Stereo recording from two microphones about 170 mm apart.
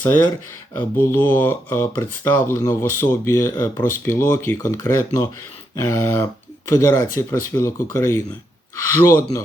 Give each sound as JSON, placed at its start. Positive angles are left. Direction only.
{"t": 0.8, "sound": "speech", "side_deg": 10}